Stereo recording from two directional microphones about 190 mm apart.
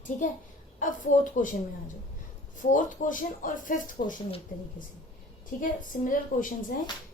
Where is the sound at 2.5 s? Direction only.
45° left (ahead or behind).